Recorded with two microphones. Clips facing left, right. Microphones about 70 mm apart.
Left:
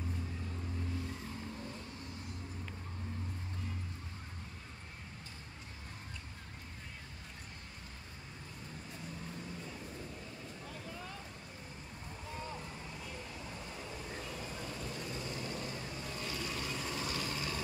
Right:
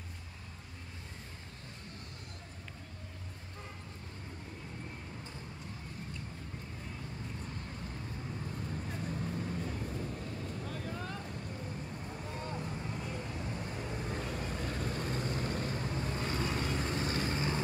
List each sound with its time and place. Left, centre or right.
14.7 s vehicle: right
16.2 s vehicle: right